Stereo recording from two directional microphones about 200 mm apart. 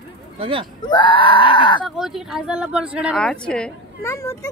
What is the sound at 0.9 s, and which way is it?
Speech, 25° left (ahead or behind).